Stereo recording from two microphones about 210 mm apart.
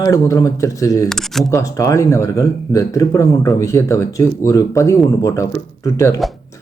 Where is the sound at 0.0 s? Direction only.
15° left (ahead or behind).